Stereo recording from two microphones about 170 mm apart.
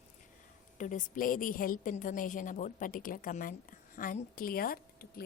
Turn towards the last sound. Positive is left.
turn(degrees=60)  # may be behind; listen again after turning